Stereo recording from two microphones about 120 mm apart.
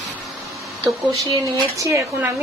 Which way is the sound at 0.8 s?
30° right (ahead or behind).